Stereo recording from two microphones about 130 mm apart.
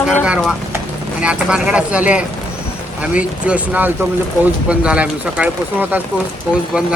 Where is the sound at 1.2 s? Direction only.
10° right (ahead or behind).